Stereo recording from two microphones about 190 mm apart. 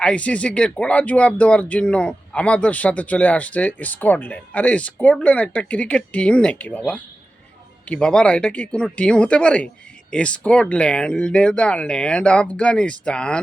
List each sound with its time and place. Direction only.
0.0 s speech: 5° left (ahead or behind)